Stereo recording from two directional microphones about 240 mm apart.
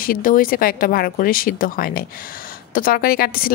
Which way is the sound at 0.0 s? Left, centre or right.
Left.